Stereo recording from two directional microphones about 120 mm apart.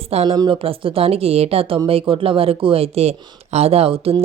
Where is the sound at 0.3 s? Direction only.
35° right (ahead or behind).